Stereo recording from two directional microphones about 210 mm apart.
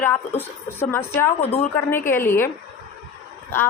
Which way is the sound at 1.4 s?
30° left (ahead or behind).